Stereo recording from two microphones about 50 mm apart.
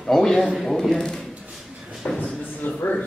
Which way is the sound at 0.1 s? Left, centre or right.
Centre.